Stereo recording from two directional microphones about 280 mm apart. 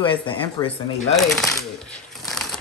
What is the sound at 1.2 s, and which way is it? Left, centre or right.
Speech, centre.